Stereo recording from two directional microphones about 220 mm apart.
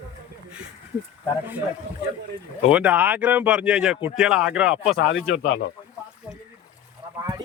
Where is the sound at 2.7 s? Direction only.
5° right (ahead or behind).